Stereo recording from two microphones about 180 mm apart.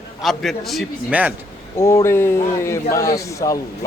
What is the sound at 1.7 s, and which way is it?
Speech, 15° left (ahead or behind).